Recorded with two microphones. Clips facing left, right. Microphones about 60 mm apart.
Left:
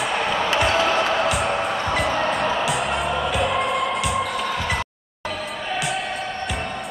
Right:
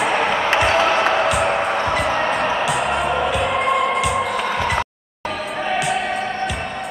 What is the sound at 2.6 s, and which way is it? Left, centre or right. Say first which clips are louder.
Music: right 3 dB; centre.